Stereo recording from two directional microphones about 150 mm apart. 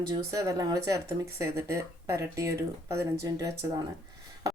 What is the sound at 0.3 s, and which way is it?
Speech, 20° right (ahead or behind).